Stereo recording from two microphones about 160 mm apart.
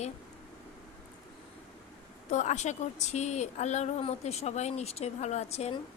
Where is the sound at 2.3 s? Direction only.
45° left (ahead or behind).